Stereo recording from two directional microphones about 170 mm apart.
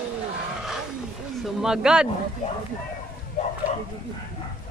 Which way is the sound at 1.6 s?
5° right (ahead or behind).